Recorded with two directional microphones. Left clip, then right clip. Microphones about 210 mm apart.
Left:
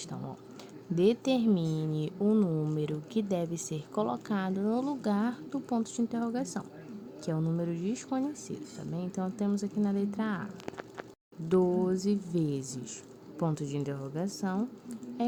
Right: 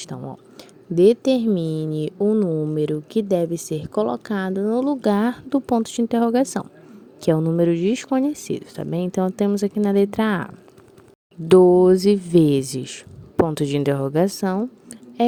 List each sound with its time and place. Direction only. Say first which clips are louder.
0.0 s a woman's voice: right 8 dB; 30° right (ahead or behind)
2.7 s speech: right 12 dB; 25° right (ahead or behind)